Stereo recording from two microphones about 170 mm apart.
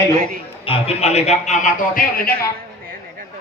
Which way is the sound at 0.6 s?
35° left (ahead or behind).